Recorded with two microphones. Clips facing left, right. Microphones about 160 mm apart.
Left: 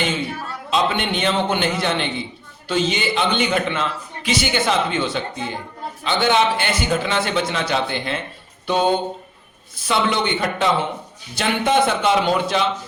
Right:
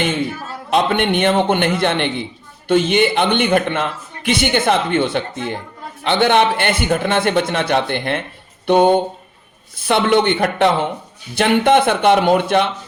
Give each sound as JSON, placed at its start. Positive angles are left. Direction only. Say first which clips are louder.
{"t": 0.7, "sound": "a man's voice", "louder": "right 5 dB", "side_deg": -60}